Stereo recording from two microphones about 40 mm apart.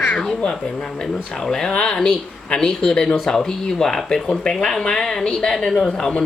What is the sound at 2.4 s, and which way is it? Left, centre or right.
Speech, left.